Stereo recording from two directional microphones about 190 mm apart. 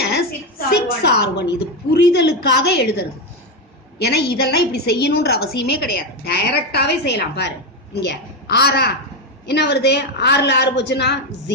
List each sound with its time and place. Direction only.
0.7 s a woman's voice: 60° left (ahead or behind)